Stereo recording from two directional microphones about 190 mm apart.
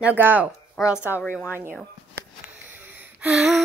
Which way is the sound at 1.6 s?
10° right (ahead or behind).